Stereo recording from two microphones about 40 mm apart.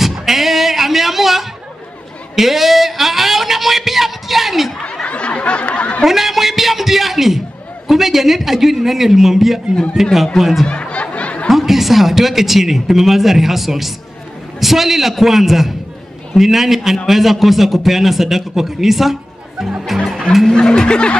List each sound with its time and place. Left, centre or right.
0.1 s music: centre
2.3 s speech: centre
5.0 s a sound: left
6.0 s a man's voice: centre
10.7 s a sound: left
11.4 s a man's voice: centre
19.9 s music: centre
20.5 s snicker: centre